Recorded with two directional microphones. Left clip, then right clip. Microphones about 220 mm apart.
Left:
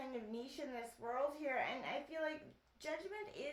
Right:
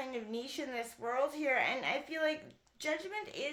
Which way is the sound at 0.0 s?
35° right (ahead or behind).